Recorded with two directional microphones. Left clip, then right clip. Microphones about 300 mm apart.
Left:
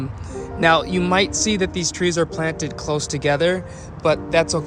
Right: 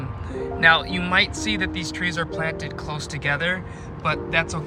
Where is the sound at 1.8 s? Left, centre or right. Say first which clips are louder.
Left 5 dB; left.